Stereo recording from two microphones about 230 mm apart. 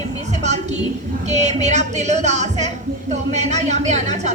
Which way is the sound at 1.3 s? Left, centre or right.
Right.